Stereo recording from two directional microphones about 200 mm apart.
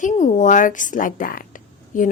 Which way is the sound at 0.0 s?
35° left (ahead or behind).